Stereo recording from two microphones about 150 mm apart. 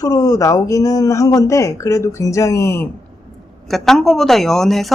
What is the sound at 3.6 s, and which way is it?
Speech, centre (ahead or behind).